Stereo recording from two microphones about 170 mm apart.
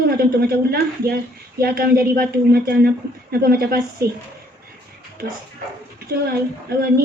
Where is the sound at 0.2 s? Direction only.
65° right (ahead or behind).